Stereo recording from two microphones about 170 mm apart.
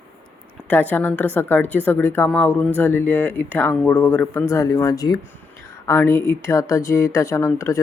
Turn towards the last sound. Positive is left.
turn(degrees=15)  # may be behind; listen again after turning